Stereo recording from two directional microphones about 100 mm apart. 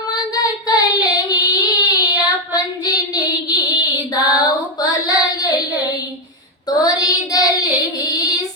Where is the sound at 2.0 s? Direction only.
15° right (ahead or behind).